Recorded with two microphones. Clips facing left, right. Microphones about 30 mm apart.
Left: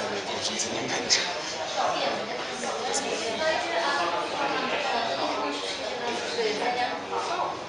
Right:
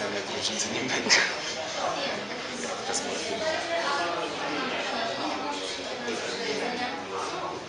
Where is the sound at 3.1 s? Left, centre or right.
Left.